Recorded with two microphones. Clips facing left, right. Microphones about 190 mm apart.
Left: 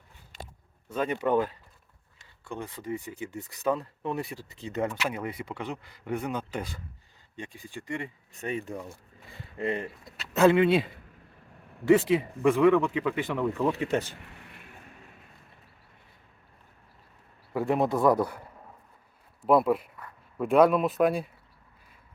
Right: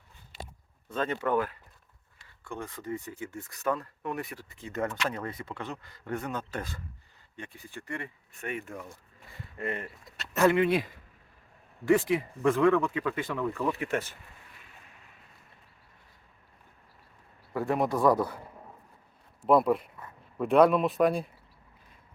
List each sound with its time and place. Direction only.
0.9 s speech: 10° left (ahead or behind)
11.9 s speech: 15° left (ahead or behind)
14.1 s a sound: 75° left (ahead or behind)
17.7 s speech: 25° left (ahead or behind)
19.5 s a man's voice: centre (ahead or behind)